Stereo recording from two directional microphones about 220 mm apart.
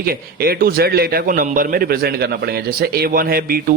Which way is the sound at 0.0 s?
45° right (ahead or behind).